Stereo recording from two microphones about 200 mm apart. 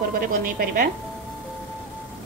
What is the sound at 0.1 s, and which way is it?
Speech, 45° right (ahead or behind).